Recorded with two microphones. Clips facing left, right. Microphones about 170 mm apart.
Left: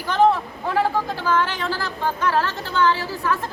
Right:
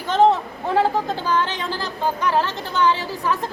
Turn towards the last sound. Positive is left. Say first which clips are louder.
# right 1 dB
turn(degrees=-15)  # may be behind; listen again after turning